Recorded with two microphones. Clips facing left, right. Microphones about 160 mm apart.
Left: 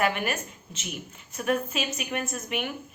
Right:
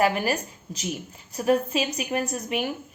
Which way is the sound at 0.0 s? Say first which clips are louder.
Right 4 dB; 35° right (ahead or behind).